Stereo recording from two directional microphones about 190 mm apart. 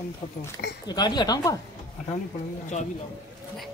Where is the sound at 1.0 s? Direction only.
20° left (ahead or behind).